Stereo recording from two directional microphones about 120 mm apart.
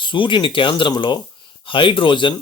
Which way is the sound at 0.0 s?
45° left (ahead or behind).